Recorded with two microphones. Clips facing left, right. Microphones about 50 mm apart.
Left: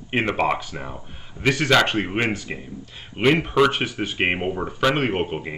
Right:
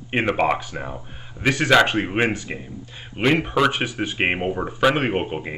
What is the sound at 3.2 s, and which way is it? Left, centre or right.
Speech, centre.